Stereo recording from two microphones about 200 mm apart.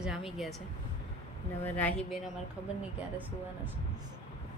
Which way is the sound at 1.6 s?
10° left (ahead or behind).